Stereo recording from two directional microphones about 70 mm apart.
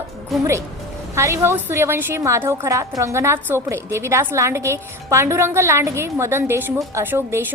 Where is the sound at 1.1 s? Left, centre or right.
Right.